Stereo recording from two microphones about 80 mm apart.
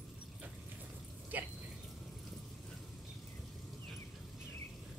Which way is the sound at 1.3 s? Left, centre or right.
Centre.